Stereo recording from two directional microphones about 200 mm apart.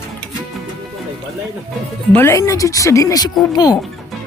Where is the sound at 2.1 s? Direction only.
10° left (ahead or behind).